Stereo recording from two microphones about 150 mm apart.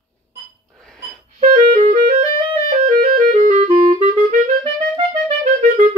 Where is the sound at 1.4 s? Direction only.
55° right (ahead or behind).